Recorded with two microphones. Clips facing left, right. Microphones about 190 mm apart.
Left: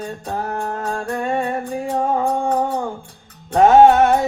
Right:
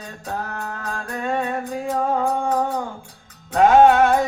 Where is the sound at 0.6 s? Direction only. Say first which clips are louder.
Left 6 dB; 30° left (ahead or behind).